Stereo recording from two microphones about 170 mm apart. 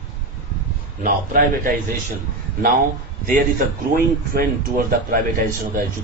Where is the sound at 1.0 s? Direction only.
50° right (ahead or behind).